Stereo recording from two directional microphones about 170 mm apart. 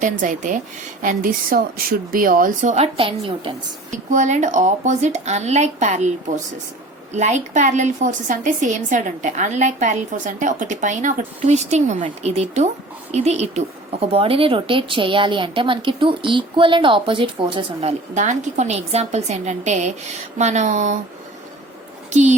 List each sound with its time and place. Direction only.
0.0 s a woman's voice: 50° right (ahead or behind); by 3.5 s 30° right (ahead or behind)
4.1 s a woman's voice: 45° right (ahead or behind)
18.1 s a woman's voice: 45° right (ahead or behind)
22.1 s speech: 45° right (ahead or behind)